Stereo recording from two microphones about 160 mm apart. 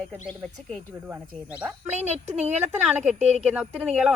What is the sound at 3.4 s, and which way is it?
Speech, 5° right (ahead or behind).